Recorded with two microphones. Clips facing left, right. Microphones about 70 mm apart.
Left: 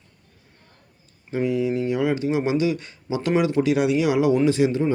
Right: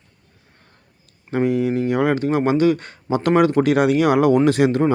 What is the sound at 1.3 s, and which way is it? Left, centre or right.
Speech, right.